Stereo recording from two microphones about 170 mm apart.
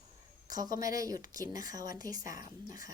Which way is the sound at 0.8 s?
20° right (ahead or behind).